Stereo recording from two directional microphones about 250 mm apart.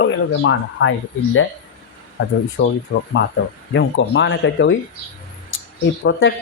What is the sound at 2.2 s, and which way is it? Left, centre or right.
Speech, left.